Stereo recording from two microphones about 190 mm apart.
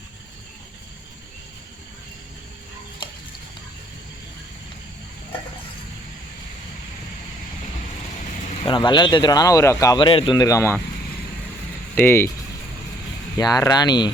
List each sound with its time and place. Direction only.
8.6 s speech: 25° left (ahead or behind)
11.9 s speech: 10° left (ahead or behind)
13.3 s speech: 20° left (ahead or behind)